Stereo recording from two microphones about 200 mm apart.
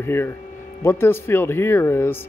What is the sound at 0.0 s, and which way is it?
Speech, 10° left (ahead or behind).